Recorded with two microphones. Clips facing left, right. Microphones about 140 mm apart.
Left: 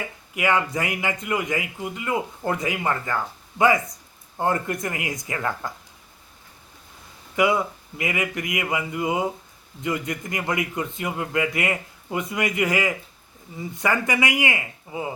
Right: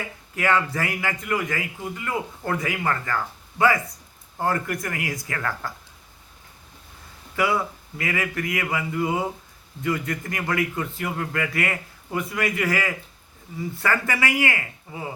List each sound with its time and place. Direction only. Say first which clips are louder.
0.3 s a man's voice: even; 15° left (ahead or behind)
4.4 s a man's voice: left 1 dB; 20° left (ahead or behind)
7.3 s a man's voice: left 3 dB; 20° left (ahead or behind)